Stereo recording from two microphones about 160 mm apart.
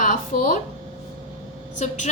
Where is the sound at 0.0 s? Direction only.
55° left (ahead or behind).